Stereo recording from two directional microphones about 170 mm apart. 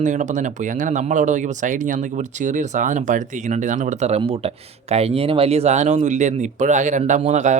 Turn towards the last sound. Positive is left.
turn(degrees=-45)  # may be behind; listen again after turning